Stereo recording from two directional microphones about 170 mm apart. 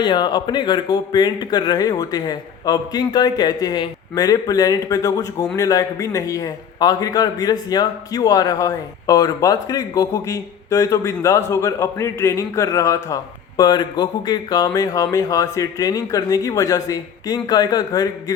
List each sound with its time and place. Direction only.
0.0 s a man's voice: 25° left (ahead or behind)